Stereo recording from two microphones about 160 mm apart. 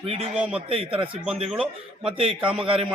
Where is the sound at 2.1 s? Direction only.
35° right (ahead or behind).